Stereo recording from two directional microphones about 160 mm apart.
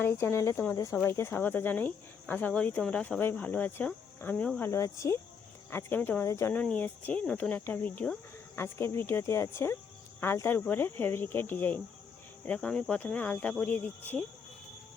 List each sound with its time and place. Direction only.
0.0 s speech: 15° left (ahead or behind)